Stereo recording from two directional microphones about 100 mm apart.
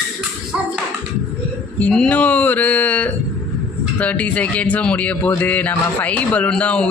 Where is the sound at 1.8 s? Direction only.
10° left (ahead or behind).